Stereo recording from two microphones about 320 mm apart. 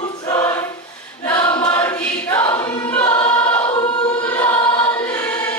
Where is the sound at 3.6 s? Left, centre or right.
Centre.